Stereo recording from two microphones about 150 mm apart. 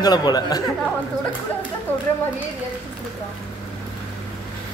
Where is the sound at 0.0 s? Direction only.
25° left (ahead or behind).